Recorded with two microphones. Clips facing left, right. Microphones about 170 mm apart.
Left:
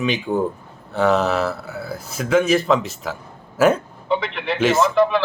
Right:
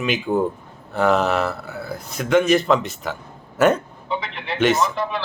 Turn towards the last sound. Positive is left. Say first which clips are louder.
# left 6 dB
turn(degrees=75)  # may be behind; listen again after turning